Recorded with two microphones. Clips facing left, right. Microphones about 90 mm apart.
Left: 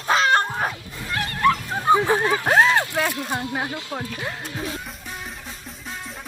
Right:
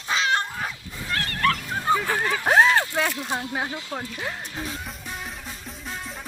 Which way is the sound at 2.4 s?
Centre (ahead or behind).